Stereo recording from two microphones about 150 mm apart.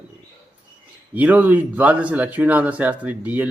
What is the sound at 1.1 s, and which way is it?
Speech, 10° right (ahead or behind).